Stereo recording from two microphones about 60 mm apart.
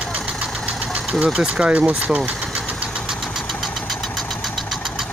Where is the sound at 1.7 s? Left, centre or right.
Right.